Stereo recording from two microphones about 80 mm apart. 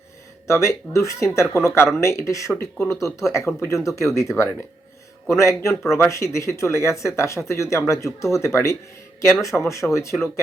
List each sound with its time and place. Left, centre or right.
0.4 s speech: left